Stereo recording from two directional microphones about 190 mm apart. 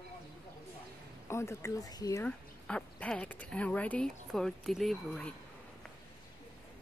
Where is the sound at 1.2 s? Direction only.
15° left (ahead or behind).